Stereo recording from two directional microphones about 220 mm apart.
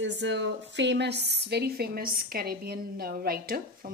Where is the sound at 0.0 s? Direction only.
55° right (ahead or behind).